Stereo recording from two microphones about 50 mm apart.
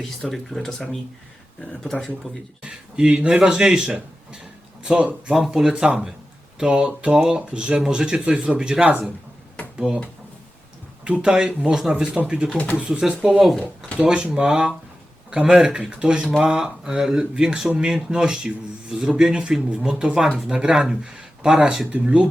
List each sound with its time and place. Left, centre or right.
0.0 s speech: centre
2.6 s speech: centre
5.3 s speech: centre
11.0 s speech: right
12.6 s speech: centre; by 22.3 s right